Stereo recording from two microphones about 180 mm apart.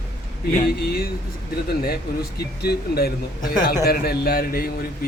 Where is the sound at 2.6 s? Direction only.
60° left (ahead or behind).